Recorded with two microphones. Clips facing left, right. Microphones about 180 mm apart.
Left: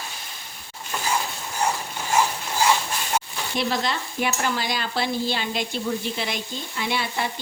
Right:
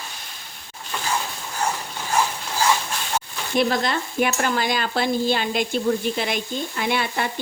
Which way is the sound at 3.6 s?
50° right (ahead or behind).